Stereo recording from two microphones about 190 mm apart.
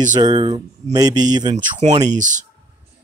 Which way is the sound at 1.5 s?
35° right (ahead or behind).